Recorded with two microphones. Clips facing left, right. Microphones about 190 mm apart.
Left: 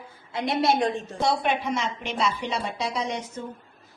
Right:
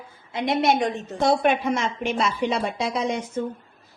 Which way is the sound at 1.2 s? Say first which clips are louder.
Right 5 dB; 50° right (ahead or behind).